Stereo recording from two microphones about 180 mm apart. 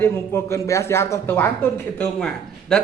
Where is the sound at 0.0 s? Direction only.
15° left (ahead or behind).